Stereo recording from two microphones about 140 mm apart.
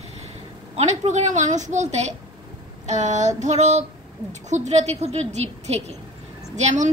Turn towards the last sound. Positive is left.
turn(degrees=-55)  # may be behind; listen again after turning